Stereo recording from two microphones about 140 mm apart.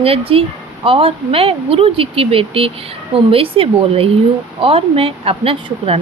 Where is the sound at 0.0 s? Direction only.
45° right (ahead or behind).